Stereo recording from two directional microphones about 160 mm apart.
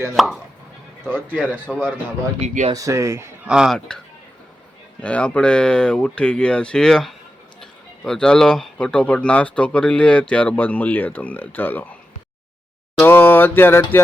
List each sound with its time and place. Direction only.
0.2 s speech: centre (ahead or behind)
1.7 s speech: centre (ahead or behind)
2.4 s speech: 45° right (ahead or behind)
2.7 s a man's voice: 20° right (ahead or behind)
3.5 s speech: 5° right (ahead or behind)
5.0 s speech: 5° left (ahead or behind)
13.0 s mantra: 15° left (ahead or behind)